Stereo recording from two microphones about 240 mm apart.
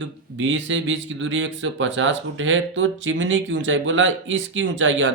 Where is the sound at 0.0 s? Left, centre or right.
Right.